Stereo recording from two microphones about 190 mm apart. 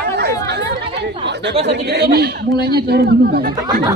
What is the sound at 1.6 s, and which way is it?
A man's voice, 60° right (ahead or behind).